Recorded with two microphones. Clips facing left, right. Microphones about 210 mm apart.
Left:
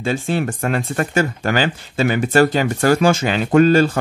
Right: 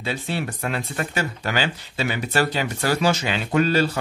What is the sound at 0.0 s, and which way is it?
Speech, 45° left (ahead or behind).